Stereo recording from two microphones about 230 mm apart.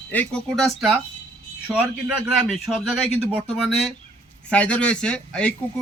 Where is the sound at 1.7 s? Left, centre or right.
Centre.